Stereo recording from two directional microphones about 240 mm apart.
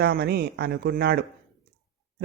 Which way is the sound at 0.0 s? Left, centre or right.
Right.